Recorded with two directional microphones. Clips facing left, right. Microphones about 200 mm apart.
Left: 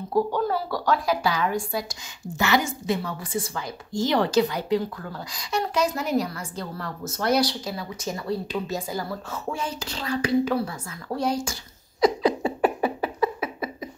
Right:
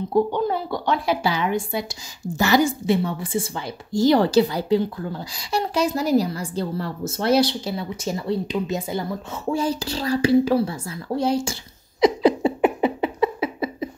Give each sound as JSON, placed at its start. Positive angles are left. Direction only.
{"t": 0.1, "sound": "a woman's voice", "side_deg": -20}
{"t": 2.3, "sound": "a woman's voice", "side_deg": -35}
{"t": 12.0, "sound": "a sound", "side_deg": -30}